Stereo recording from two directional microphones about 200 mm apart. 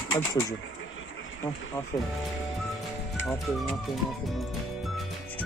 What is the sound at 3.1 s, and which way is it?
Speech, centre (ahead or behind).